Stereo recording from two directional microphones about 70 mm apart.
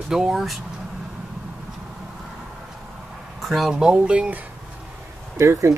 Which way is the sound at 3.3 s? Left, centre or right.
Centre.